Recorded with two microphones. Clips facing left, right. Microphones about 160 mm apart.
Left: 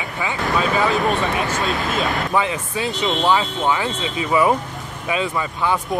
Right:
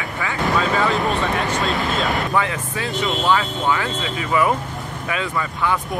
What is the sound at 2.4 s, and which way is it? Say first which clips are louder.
Speech: left 1 dB; 20° left (ahead or behind).